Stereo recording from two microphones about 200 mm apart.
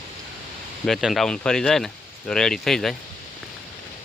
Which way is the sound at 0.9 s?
Centre (ahead or behind).